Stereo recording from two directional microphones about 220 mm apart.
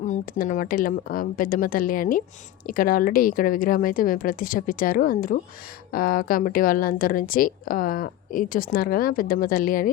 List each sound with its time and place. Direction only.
0.0 s a woman's voice: 35° left (ahead or behind)